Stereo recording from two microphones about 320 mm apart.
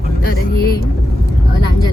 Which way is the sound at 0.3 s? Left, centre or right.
Left.